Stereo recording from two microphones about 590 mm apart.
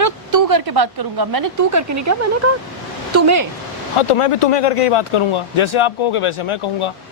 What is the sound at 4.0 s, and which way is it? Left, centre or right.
Speech, left.